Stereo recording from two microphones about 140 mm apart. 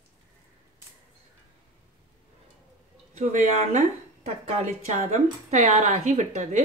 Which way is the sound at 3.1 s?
55° right (ahead or behind).